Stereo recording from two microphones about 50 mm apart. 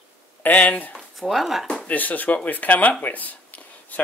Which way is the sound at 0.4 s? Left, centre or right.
Left.